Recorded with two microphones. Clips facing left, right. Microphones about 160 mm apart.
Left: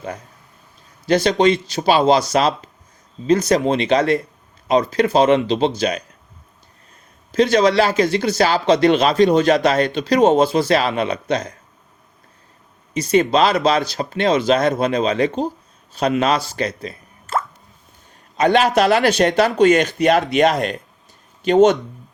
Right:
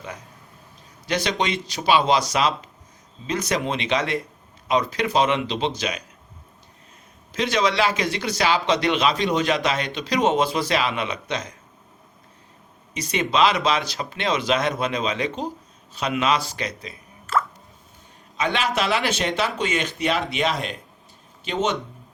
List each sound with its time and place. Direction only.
1.0 s speech: 40° left (ahead or behind)
7.3 s speech: 40° left (ahead or behind)
13.0 s speech: 35° left (ahead or behind)
18.3 s speech: 45° left (ahead or behind)